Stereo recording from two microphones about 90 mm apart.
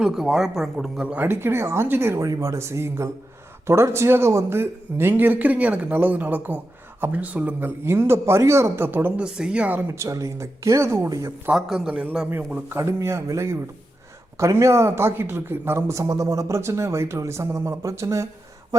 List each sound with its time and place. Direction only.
0.0 s speech: 5° right (ahead or behind)
1.0 s a man's voice: 20° right (ahead or behind)
9.2 s speech: 10° right (ahead or behind)
9.8 s speech: 30° right (ahead or behind)
11.5 s speech: 5° right (ahead or behind)
12.6 s speech: 30° right (ahead or behind)